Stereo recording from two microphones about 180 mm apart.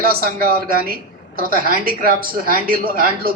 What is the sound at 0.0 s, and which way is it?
Speech, 55° right (ahead or behind).